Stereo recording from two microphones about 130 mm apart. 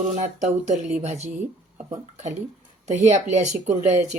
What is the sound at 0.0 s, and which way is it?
Speech, 65° right (ahead or behind).